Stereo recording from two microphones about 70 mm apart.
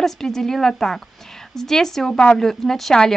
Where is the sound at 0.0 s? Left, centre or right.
Centre.